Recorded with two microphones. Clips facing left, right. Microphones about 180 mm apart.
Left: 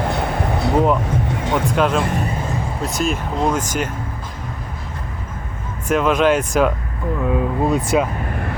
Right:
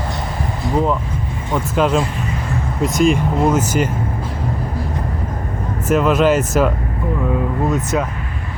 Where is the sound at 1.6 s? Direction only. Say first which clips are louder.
Right 3 dB; 5° right (ahead or behind).